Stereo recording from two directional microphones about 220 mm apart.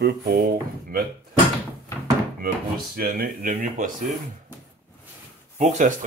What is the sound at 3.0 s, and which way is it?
Speech, 40° right (ahead or behind).